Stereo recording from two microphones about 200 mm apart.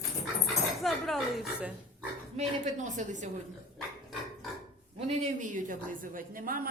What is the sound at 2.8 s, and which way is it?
Speech, 40° right (ahead or behind).